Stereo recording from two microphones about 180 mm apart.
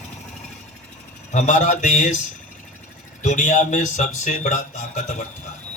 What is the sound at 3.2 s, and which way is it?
Speech, 45° left (ahead or behind).